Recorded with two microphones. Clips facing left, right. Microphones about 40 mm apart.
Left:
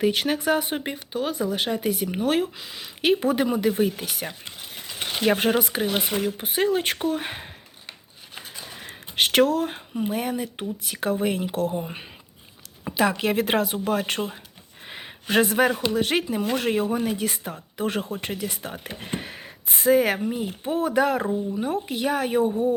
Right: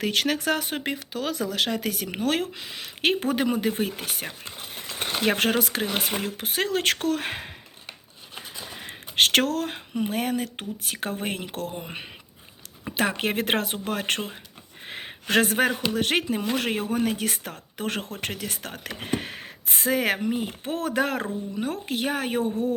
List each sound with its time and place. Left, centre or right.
0.0 s speech: right
0.9 s speech: right
2.1 s speech: right
5.4 s speech: right
6.0 s speech: right
9.1 s speech: right
13.0 s speech: right
14.8 s a sound: right
15.9 s speech: right
16.9 s speech: right
18.9 s speech: right